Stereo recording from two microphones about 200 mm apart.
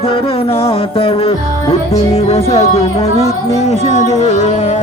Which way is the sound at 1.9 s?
30° left (ahead or behind).